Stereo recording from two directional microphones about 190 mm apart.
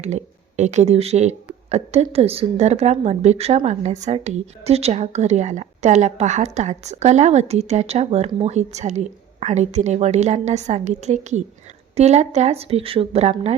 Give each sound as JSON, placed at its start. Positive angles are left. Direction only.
{"t": 0.0, "sound": "speech", "side_deg": -35}